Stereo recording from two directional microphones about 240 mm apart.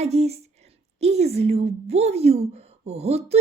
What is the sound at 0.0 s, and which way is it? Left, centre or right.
Speech, right.